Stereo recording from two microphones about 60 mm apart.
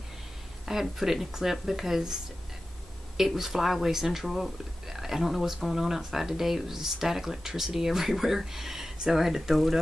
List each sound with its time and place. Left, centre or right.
0.7 s speech: centre
3.2 s speech: centre